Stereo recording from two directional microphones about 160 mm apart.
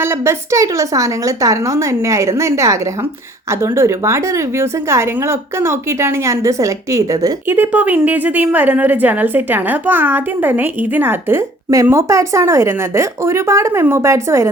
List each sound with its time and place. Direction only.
0.0 s a woman's voice: 15° right (ahead or behind)